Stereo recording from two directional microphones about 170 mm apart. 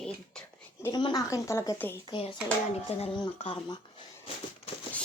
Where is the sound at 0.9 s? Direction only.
25° left (ahead or behind).